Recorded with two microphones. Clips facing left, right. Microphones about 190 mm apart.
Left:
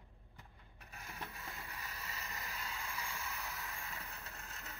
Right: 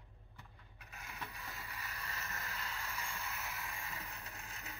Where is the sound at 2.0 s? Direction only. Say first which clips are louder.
Right 3 dB; 15° left (ahead or behind).